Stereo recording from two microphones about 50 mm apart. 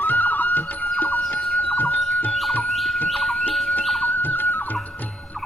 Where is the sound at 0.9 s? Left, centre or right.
Left.